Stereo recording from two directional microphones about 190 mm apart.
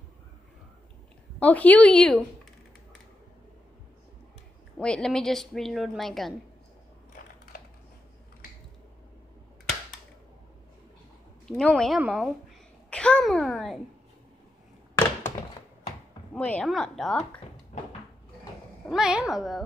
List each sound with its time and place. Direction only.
1.4 s a woman's voice: 10° left (ahead or behind)
4.7 s a woman's voice: 5° left (ahead or behind)
11.4 s a woman's voice: centre (ahead or behind)
16.3 s a woman's voice: 5° left (ahead or behind)
18.9 s a woman's voice: 5° right (ahead or behind)